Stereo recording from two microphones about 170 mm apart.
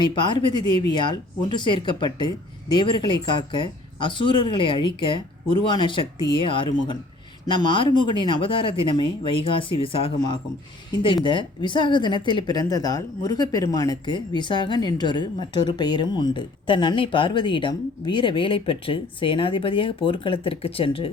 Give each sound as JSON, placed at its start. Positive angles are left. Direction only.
{"t": 0.0, "sound": "a woman's voice", "side_deg": 25}